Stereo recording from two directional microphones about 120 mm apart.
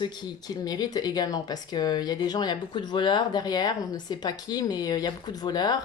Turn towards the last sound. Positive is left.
turn(degrees=35)  # may be behind; listen again after turning